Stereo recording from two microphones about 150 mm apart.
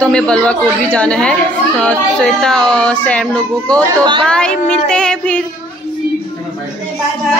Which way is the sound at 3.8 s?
30° right (ahead or behind).